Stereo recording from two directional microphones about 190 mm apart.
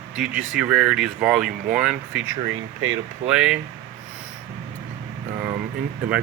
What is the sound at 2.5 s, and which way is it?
Speech, 90° right.